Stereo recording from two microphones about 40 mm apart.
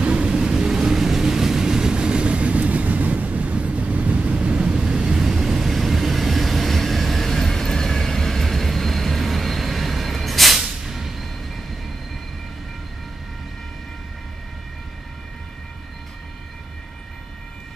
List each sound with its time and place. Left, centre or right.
0.0 s vehicle: right
5.2 s vehicle: centre
10.6 s a sound: centre